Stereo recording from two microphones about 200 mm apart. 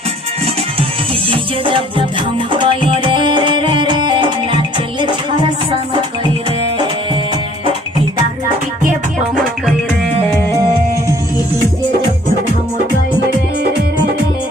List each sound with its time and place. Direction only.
1.3 s music: 25° right (ahead or behind)